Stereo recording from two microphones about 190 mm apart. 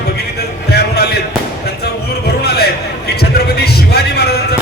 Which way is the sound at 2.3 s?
55° left (ahead or behind).